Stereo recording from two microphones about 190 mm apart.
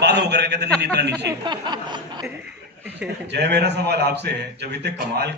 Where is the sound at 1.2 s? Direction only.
25° right (ahead or behind).